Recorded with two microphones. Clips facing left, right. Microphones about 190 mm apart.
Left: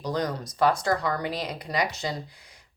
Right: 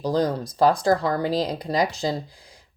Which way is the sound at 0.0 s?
30° right (ahead or behind).